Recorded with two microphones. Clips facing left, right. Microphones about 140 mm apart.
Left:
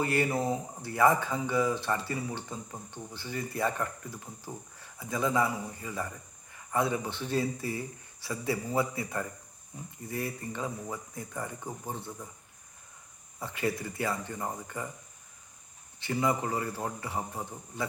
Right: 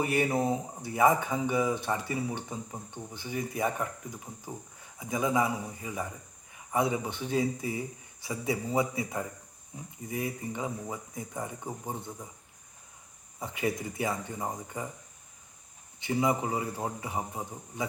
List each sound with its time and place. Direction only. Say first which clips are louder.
0.0 s speech: right 1 dB; 20° right (ahead or behind)
13.4 s speech: even; 20° right (ahead or behind)
16.0 s speech: right 1 dB; 20° right (ahead or behind)